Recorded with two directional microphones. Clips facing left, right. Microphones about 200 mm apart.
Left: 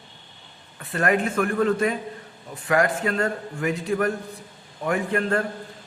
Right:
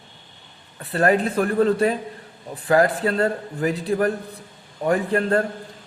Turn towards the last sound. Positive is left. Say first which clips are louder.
# right 3 dB
turn(degrees=-35)  # may be behind; listen again after turning